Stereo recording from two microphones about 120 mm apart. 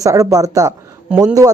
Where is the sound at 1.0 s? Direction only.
10° right (ahead or behind).